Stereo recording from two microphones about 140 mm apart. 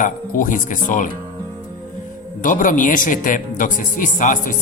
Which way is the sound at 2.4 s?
70° left (ahead or behind).